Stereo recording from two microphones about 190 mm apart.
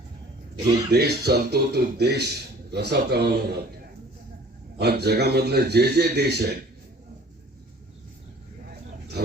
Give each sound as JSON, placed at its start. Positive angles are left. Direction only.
{"t": 0.9, "sound": "a man's voice", "side_deg": -60}
{"t": 4.8, "sound": "a man's voice", "side_deg": -60}